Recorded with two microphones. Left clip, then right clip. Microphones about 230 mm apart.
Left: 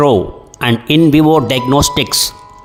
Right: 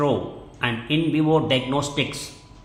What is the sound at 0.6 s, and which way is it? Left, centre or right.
Speech, left.